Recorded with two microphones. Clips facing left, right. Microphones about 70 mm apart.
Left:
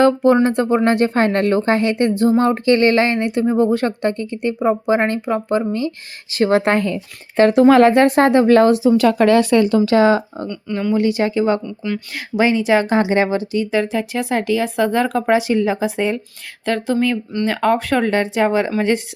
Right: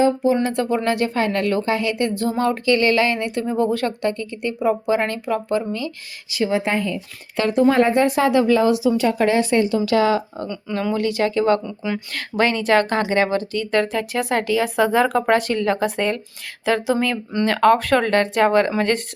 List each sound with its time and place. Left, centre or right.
0.0 s speech: left
0.4 s speech: left
6.3 s speech: left
7.4 s speech: left
7.8 s speech: left
8.0 s speech: left
9.1 s speech: left
9.8 s speech: left; by 11.6 s centre
11.6 s speech: centre
12.1 s speech: centre
16.6 s speech: centre